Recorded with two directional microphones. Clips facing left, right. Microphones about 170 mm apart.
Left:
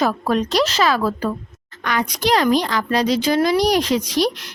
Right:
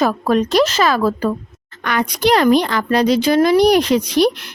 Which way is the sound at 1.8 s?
60° right (ahead or behind).